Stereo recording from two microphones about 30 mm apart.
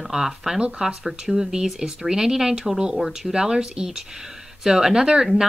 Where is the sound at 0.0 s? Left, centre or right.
Centre.